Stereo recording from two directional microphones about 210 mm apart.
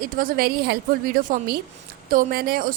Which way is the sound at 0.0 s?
40° right (ahead or behind).